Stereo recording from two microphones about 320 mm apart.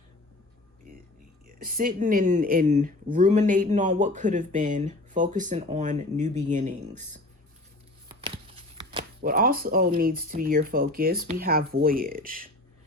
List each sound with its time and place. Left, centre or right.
1.5 s speech: right
8.9 s a sound: centre
9.3 s speech: right